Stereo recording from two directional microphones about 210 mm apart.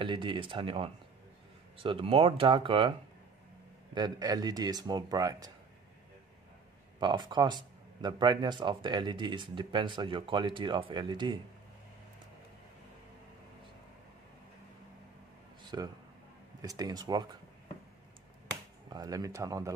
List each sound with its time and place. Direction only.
0.0 s speech: 25° right (ahead or behind)
3.9 s speech: 20° right (ahead or behind)
7.0 s speech: 20° right (ahead or behind)
15.6 s a sound: 20° right (ahead or behind)
16.6 s speech: 15° right (ahead or behind)
18.9 s speech: 15° right (ahead or behind)